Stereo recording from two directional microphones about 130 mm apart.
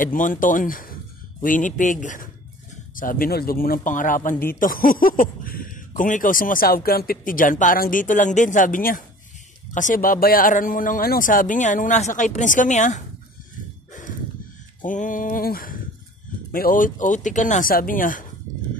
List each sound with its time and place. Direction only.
0.0 s speech: 90° left
3.0 s speech: 90° left; by 13.0 s 70° left (ahead or behind)
14.8 s speech: 90° left